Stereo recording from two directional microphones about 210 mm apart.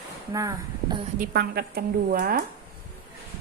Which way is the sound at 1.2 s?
50° right (ahead or behind).